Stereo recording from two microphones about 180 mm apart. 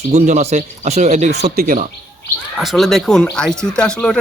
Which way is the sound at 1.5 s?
55° right (ahead or behind).